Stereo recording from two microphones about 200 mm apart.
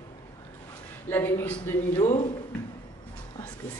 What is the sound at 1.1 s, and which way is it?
A man's voice, 10° left (ahead or behind).